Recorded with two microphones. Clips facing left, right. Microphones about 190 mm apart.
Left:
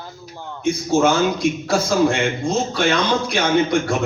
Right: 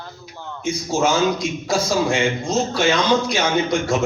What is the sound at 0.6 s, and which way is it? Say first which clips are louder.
A man's voice: left 3 dB; 60° left (ahead or behind).